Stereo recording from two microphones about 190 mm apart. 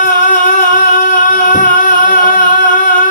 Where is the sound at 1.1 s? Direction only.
40° left (ahead or behind).